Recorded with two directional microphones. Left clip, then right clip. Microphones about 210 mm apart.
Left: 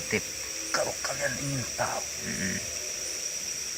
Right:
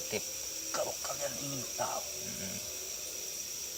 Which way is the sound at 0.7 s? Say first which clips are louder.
Left 7 dB; 20° left (ahead or behind).